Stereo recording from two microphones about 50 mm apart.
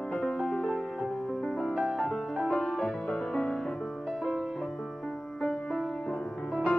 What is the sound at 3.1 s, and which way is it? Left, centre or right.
Music, centre.